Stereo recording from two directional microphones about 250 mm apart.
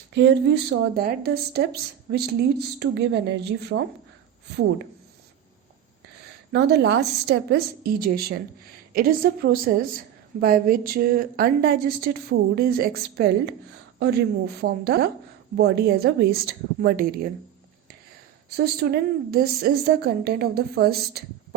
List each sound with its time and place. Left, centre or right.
0.1 s speech: right
6.5 s speech: right
18.5 s speech: right